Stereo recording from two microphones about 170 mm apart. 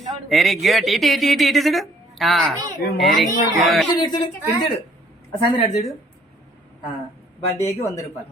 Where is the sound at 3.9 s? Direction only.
25° left (ahead or behind).